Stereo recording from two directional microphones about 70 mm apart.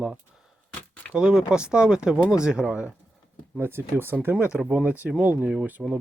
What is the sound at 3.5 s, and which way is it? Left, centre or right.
Speech, right.